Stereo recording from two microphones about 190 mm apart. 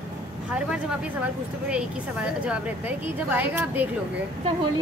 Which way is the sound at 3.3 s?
10° right (ahead or behind).